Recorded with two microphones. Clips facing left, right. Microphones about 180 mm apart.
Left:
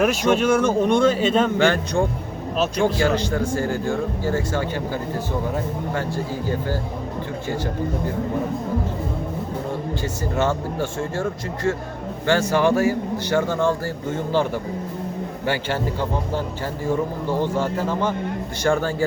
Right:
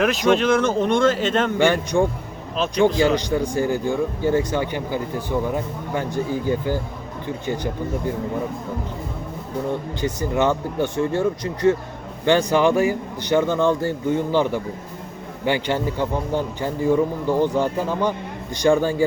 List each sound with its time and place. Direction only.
0.0 s speech: 10° left (ahead or behind)
1.5 s speech: 15° right (ahead or behind)
10.0 s speech: 15° right (ahead or behind)
15.4 s speech: 15° right (ahead or behind)